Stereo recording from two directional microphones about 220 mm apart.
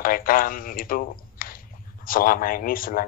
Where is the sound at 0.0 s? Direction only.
40° left (ahead or behind).